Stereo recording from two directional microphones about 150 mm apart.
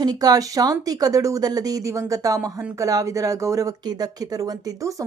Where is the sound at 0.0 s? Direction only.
25° right (ahead or behind).